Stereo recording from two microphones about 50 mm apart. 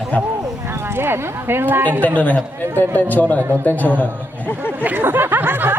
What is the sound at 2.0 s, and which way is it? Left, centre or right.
Speech, left.